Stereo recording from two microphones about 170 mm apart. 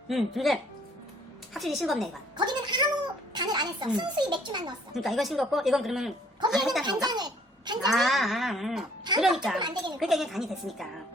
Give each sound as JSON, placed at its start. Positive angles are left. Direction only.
{"t": 0.1, "sound": "speech", "side_deg": 0}
{"t": 2.4, "sound": "a sound", "side_deg": -25}
{"t": 3.3, "sound": "a child's voice", "side_deg": -25}
{"t": 4.9, "sound": "speech", "side_deg": 0}
{"t": 7.1, "sound": "a sound", "side_deg": -25}
{"t": 7.9, "sound": "speech", "side_deg": 0}
{"t": 9.6, "sound": "a child's voice", "side_deg": -25}
{"t": 10.0, "sound": "speech", "side_deg": 0}